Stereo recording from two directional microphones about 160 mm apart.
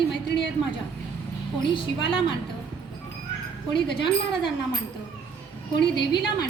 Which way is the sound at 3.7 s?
30° left (ahead or behind).